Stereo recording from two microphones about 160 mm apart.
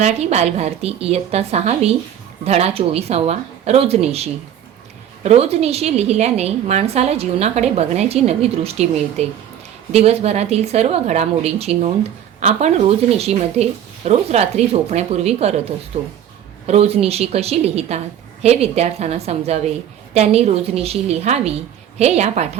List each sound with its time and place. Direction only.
0.0 s a woman's voice: 45° right (ahead or behind)
16.6 s a woman's voice: 40° right (ahead or behind)